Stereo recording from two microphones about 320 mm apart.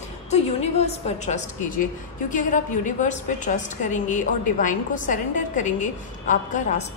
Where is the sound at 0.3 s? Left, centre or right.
Centre.